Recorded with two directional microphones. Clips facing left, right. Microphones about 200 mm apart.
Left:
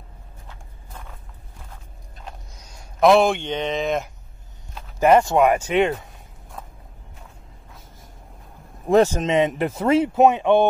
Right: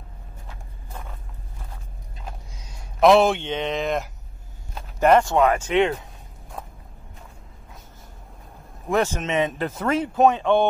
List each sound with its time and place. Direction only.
2.5 s speech: centre (ahead or behind)
5.0 s speech: 10° left (ahead or behind)
8.8 s speech: 35° left (ahead or behind)
9.4 s speech: 15° left (ahead or behind)